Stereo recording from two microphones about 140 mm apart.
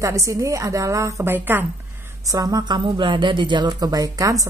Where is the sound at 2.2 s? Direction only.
25° right (ahead or behind).